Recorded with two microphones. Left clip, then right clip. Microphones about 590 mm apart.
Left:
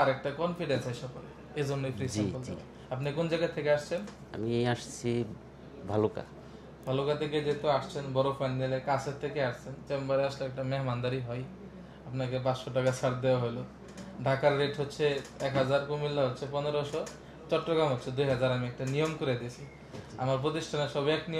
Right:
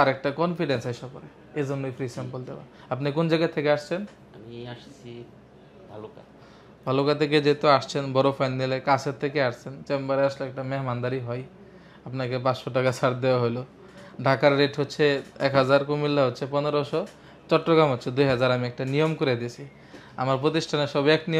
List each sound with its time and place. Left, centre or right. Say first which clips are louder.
0.0 s speech: right 6 dB; right
1.5 s a man's voice: right 5 dB; right
2.9 s speech: right 7 dB; right
4.5 s speech: left 9 dB; left
6.9 s speech: right 8 dB; right